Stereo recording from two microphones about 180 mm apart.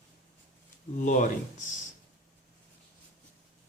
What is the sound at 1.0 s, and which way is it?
Speech, 45° left (ahead or behind).